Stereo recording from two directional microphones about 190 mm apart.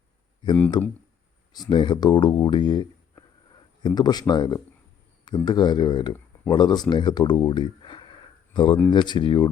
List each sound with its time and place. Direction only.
0.8 s speech: 20° left (ahead or behind)